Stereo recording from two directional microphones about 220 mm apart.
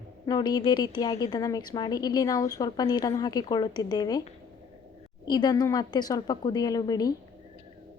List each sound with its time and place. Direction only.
0.3 s a woman's voice: 20° left (ahead or behind)
5.3 s a woman's voice: 20° left (ahead or behind)